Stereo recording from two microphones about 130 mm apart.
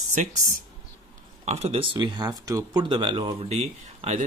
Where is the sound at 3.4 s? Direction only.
55° right (ahead or behind).